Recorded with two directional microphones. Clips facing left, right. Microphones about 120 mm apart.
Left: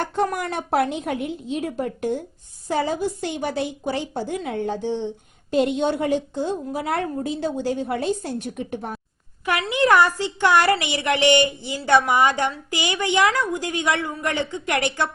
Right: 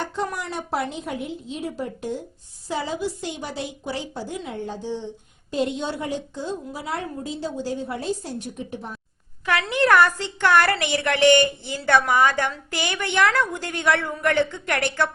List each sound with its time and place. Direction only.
0.2 s a woman's voice: 50° left (ahead or behind)
9.7 s a woman's voice: 15° left (ahead or behind)
10.8 s speech: 50° right (ahead or behind)
11.0 s a woman's voice: 15° left (ahead or behind)